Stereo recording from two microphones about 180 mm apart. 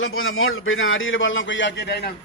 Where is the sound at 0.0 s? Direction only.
90° left; by 2.0 s 65° left (ahead or behind).